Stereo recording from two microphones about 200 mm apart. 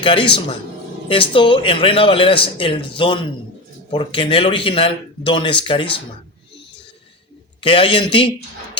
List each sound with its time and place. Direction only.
0.0 s a man's voice: 25° left (ahead or behind)
7.6 s a man's voice: 25° left (ahead or behind)